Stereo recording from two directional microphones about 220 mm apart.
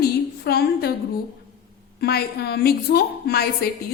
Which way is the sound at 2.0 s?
45° left (ahead or behind).